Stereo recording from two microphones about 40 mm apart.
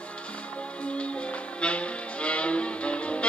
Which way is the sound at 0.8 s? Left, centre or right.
Left.